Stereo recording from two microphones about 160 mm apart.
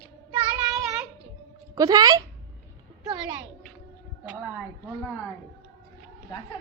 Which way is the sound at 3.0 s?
25° right (ahead or behind).